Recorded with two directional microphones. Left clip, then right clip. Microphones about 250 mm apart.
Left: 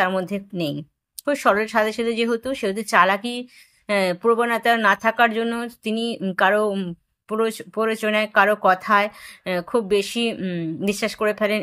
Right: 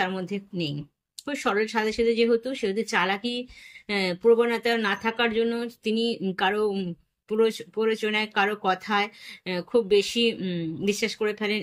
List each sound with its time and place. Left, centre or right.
0.0 s speech: centre